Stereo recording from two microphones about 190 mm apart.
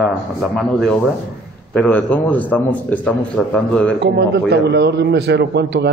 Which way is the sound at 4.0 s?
65° right (ahead or behind).